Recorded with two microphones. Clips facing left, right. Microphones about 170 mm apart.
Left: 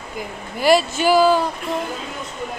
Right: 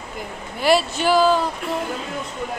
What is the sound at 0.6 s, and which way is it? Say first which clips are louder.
Speech: left 2 dB; centre (ahead or behind).